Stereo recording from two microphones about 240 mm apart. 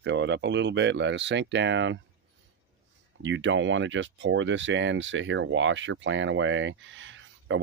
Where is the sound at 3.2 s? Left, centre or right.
Right.